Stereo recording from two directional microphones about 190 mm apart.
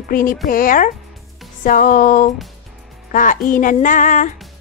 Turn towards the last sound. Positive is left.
turn(degrees=40)  # may be behind; listen again after turning